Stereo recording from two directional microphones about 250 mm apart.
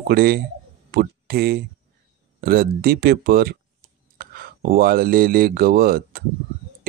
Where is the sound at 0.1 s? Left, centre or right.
Right.